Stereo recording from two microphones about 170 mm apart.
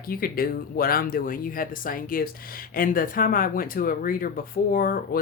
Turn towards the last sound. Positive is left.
turn(degrees=60)  # may be behind; listen again after turning